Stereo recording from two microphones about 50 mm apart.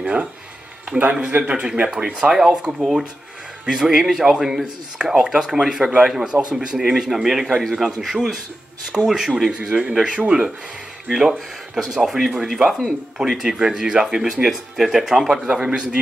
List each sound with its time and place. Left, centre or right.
0.0 s a sound: right
0.8 s a man's voice: right
2.3 s a man's voice: centre
11.1 s speech: centre
11.3 s speech: centre
11.9 s speech: centre
15.4 s speech: centre